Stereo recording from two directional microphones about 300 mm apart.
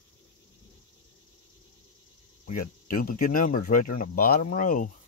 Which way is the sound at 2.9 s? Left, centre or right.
Left.